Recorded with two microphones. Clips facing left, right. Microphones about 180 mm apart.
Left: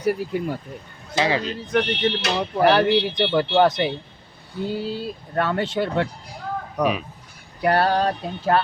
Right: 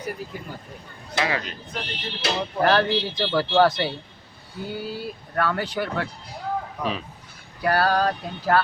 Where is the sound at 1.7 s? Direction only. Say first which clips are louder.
Left 13 dB; 70° left (ahead or behind).